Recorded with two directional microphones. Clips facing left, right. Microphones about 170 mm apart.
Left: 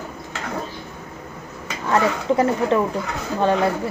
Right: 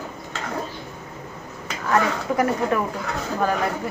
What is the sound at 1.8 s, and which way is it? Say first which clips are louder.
Speech: left 3 dB; 25° left (ahead or behind).